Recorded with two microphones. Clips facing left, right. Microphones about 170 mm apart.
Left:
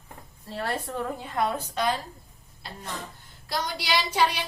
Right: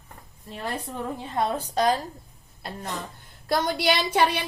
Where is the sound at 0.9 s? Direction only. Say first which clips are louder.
Even; 25° right (ahead or behind).